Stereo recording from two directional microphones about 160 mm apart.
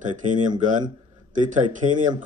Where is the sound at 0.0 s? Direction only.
50° right (ahead or behind).